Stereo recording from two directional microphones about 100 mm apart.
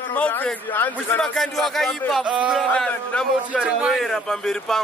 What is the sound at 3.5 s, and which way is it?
Speech, 10° right (ahead or behind).